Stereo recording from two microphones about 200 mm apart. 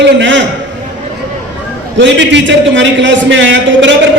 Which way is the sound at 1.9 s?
65° right (ahead or behind).